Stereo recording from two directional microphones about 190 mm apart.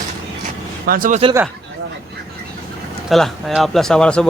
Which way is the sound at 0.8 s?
50° right (ahead or behind).